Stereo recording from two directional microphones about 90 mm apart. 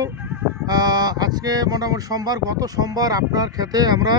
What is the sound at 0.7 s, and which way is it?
Speech, 50° right (ahead or behind).